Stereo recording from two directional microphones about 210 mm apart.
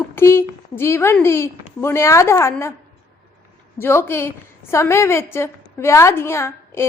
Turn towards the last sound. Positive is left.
turn(degrees=15)  # may be behind; listen again after turning